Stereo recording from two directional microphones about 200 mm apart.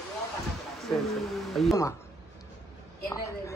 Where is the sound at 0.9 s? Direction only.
Centre (ahead or behind).